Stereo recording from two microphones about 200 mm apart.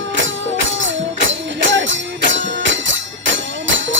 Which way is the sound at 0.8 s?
70° right (ahead or behind).